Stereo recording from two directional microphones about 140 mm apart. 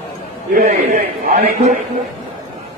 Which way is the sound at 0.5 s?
80° right.